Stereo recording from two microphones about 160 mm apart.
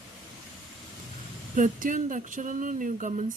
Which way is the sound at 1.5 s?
55° right (ahead or behind).